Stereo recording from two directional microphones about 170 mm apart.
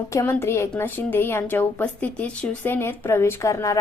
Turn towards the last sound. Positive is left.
turn(degrees=20)  # may be behind; listen again after turning